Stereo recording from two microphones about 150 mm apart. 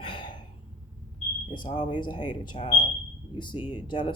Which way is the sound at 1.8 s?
30° left (ahead or behind).